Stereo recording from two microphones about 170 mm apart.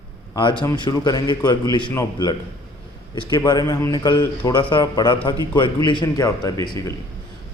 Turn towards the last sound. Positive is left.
turn(degrees=20)  # may be behind; listen again after turning